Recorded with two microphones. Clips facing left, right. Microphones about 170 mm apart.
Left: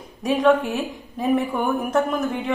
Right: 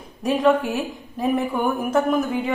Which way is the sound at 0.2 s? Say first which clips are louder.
Left 1 dB; centre (ahead or behind).